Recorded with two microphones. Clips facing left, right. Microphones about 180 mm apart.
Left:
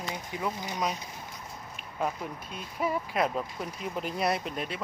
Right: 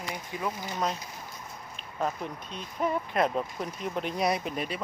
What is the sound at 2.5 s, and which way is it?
Speech, 5° left (ahead or behind).